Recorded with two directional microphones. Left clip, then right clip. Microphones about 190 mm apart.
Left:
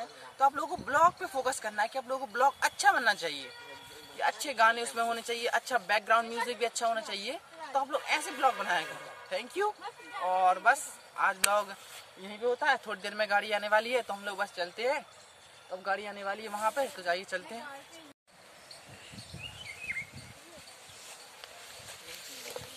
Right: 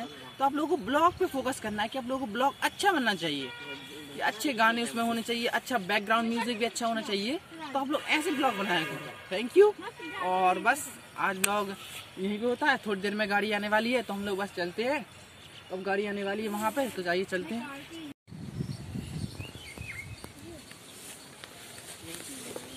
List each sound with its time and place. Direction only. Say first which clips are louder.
0.4 s a man's voice: even; centre (ahead or behind)
9.5 s a man's voice: right 13 dB; 15° left (ahead or behind)